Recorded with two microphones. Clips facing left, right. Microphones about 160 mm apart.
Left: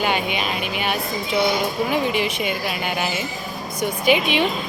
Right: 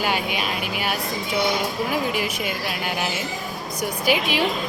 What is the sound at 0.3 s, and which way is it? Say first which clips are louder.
Speech: left 2 dB; 5° right (ahead or behind).